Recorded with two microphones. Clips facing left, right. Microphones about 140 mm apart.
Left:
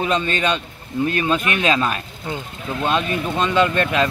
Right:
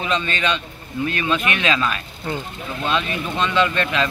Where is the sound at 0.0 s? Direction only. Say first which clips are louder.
Left 3 dB; 45° left (ahead or behind).